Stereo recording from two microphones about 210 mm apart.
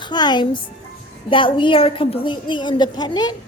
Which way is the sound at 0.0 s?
20° left (ahead or behind).